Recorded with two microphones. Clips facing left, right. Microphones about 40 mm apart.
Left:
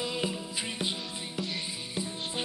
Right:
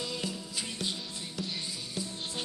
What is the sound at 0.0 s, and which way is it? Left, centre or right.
Music, left.